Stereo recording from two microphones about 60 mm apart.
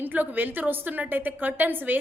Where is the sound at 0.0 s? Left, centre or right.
Right.